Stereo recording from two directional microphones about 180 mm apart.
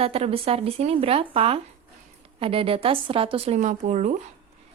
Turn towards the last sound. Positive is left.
turn(degrees=-40)  # may be behind; listen again after turning